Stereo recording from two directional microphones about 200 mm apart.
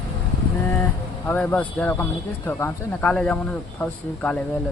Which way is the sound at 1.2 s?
10° left (ahead or behind).